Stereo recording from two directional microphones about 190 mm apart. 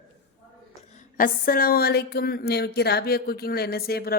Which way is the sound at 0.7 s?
40° left (ahead or behind).